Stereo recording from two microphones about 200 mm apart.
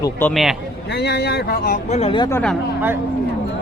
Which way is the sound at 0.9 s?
55° left (ahead or behind).